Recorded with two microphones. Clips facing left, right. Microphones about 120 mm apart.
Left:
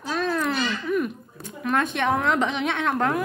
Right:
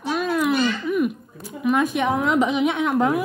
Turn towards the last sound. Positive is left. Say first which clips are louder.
# right 3 dB
turn(degrees=-10)  # may be behind; listen again after turning